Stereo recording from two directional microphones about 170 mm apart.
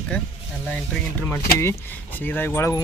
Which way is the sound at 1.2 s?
15° left (ahead or behind).